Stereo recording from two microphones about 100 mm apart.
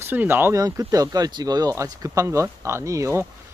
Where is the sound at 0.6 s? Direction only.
35° right (ahead or behind).